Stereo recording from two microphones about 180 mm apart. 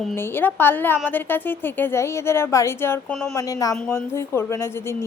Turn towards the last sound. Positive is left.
turn(degrees=15)  # may be behind; listen again after turning